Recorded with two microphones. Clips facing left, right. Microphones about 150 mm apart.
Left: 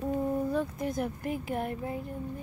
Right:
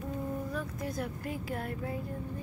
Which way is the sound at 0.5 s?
25° left (ahead or behind).